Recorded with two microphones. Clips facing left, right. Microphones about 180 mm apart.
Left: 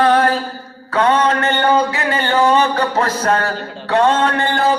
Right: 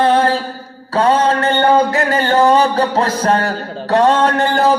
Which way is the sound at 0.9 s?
30° right (ahead or behind).